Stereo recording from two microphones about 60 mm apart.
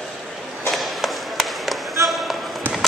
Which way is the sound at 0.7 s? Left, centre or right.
Centre.